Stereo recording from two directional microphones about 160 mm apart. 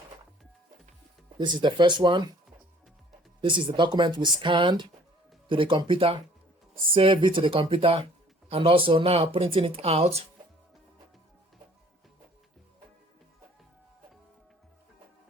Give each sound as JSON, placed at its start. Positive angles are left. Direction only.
{"t": 1.4, "sound": "speech", "side_deg": -30}
{"t": 3.4, "sound": "speech", "side_deg": -30}